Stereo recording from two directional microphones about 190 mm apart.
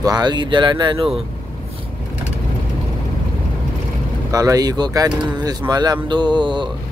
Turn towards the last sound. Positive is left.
turn(degrees=-25)  # may be behind; listen again after turning